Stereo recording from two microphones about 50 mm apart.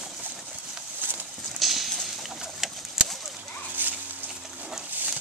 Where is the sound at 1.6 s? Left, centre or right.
Centre.